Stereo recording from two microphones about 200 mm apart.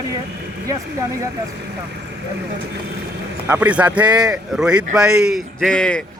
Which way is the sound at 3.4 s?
10° right (ahead or behind).